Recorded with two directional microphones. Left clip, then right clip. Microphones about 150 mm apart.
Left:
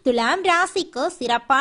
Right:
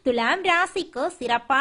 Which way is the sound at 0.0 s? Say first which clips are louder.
Left 2 dB; 35° left (ahead or behind).